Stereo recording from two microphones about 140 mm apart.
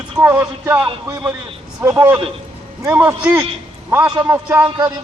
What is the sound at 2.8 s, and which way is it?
Speech, 15° right (ahead or behind).